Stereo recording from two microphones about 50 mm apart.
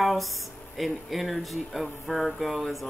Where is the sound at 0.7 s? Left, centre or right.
Centre.